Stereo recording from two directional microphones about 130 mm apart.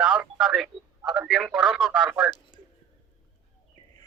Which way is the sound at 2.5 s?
35° left (ahead or behind).